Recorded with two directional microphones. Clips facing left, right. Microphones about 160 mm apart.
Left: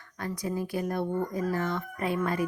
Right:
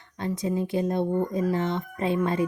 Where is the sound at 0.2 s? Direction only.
25° right (ahead or behind).